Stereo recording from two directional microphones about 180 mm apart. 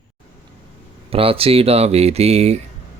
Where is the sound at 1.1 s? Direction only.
30° right (ahead or behind).